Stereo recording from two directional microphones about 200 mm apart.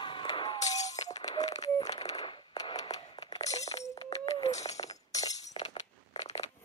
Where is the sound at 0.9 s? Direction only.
20° left (ahead or behind).